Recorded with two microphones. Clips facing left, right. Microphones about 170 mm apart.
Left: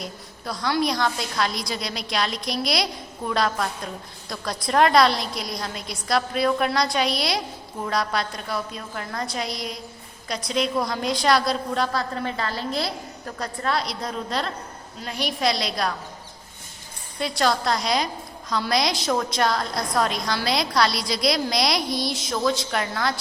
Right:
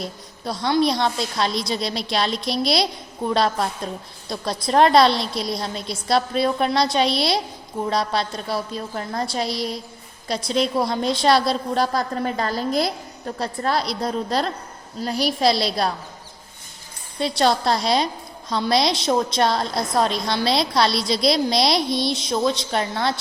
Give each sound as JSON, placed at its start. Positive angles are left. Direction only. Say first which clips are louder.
{"t": 0.0, "sound": "a woman's voice", "louder": "right 4 dB", "side_deg": -25}
{"t": 13.2, "sound": "a woman's voice", "louder": "right 4 dB", "side_deg": -30}
{"t": 17.2, "sound": "a woman's voice", "louder": "right 3 dB", "side_deg": -25}